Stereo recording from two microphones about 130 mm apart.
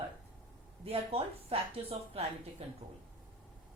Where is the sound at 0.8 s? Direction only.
50° right (ahead or behind).